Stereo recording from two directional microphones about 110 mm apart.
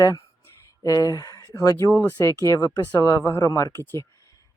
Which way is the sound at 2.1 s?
30° left (ahead or behind).